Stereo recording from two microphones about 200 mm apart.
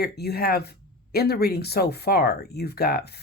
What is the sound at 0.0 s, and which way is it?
Speech, 55° left (ahead or behind).